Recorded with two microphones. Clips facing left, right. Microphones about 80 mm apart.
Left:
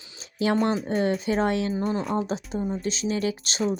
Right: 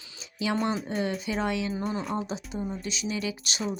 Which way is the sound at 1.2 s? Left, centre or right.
Left.